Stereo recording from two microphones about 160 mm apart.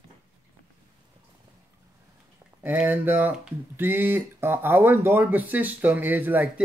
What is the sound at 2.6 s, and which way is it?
Speech, 10° right (ahead or behind).